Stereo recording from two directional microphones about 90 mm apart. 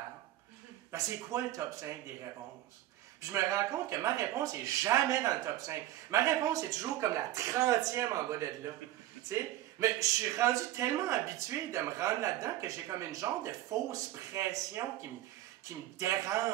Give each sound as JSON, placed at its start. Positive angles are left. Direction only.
{"t": 0.9, "sound": "speech", "side_deg": -40}
{"t": 3.2, "sound": "speech", "side_deg": -35}